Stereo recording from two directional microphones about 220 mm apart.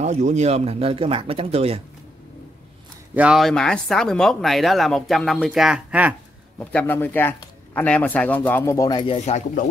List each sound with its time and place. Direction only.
0.0 s speech: 30° right (ahead or behind)
3.2 s speech: centre (ahead or behind)
6.6 s speech: 5° left (ahead or behind); by 9.7 s 30° left (ahead or behind)